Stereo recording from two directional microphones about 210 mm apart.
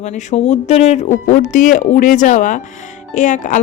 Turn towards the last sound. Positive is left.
turn(degrees=35)  # may be behind; listen again after turning